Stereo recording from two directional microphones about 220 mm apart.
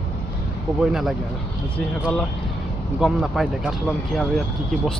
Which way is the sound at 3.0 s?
Centre (ahead or behind).